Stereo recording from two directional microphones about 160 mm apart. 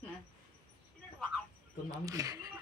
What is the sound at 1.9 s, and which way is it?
Speech, 20° right (ahead or behind).